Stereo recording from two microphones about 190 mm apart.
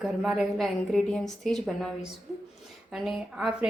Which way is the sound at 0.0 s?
Centre (ahead or behind).